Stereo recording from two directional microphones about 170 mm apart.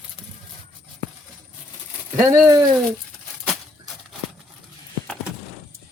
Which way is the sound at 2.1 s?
20° right (ahead or behind).